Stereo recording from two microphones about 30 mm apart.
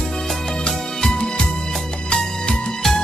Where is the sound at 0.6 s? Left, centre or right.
Left.